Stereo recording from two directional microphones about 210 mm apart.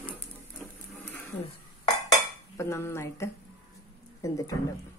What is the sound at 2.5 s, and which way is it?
A woman's voice, 10° left (ahead or behind).